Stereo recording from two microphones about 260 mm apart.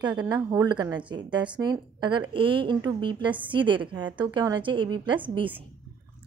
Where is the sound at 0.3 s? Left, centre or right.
Centre.